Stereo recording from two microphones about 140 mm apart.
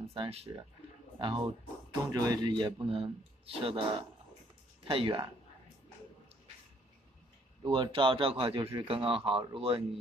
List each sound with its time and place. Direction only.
0.1 s a man's voice: 45° right (ahead or behind)
4.8 s speech: 35° right (ahead or behind)
7.6 s a man's voice: 35° right (ahead or behind)